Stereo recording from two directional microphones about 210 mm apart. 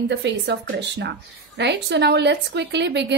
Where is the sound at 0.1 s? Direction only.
55° right (ahead or behind).